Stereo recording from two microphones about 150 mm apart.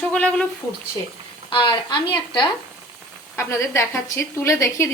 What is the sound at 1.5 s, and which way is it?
A woman's voice, 35° left (ahead or behind).